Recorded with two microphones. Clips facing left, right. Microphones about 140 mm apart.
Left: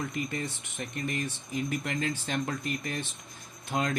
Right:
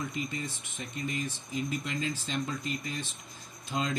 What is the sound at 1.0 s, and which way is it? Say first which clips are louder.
A man's voice: even; 55° left (ahead or behind).